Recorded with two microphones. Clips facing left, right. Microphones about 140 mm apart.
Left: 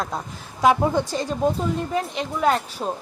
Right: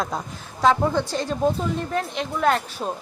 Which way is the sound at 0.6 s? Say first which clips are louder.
Left 1 dB; 15° left (ahead or behind).